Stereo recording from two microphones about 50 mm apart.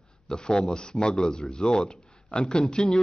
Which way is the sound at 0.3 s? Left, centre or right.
Centre.